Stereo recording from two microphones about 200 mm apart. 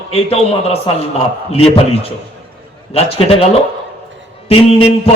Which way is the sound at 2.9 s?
30° left (ahead or behind).